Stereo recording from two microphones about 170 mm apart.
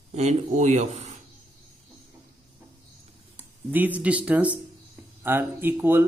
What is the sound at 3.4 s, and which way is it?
Speech, 10° right (ahead or behind).